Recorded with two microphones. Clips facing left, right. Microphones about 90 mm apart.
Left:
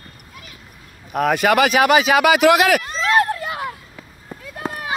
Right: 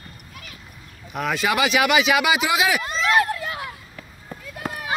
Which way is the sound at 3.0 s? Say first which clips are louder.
Left 2 dB; 35° left (ahead or behind).